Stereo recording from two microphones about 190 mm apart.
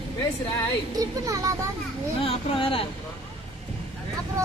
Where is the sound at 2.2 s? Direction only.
30° left (ahead or behind).